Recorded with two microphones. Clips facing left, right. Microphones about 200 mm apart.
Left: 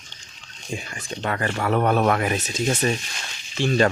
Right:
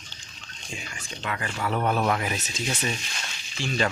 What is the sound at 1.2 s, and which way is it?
Speech, 55° left (ahead or behind).